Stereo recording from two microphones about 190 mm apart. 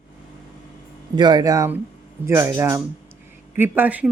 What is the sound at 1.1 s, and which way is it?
Speech, 20° right (ahead or behind).